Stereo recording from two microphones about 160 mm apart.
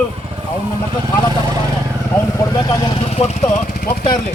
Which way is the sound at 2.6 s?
25° left (ahead or behind).